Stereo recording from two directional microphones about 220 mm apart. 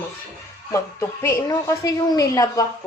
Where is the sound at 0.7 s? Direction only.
15° left (ahead or behind).